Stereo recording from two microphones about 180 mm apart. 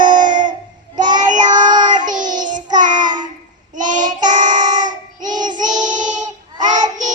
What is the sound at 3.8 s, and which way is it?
Child singing, 45° right (ahead or behind).